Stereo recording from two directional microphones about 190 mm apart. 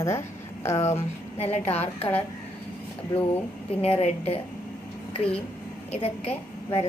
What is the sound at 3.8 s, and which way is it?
Speech, 30° left (ahead or behind).